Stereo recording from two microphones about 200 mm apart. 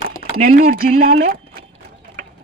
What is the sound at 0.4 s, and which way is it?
Speech, 45° right (ahead or behind).